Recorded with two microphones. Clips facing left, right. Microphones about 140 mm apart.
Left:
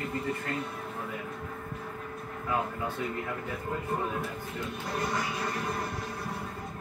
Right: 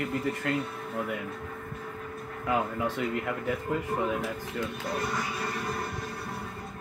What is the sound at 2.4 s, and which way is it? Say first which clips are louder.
Speech: right 3 dB; 90° right.